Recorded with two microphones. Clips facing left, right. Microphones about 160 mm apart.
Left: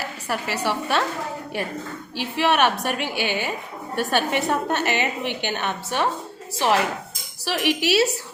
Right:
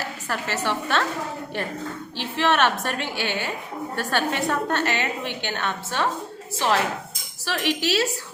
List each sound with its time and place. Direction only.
0.3 s a woman's voice: 10° left (ahead or behind)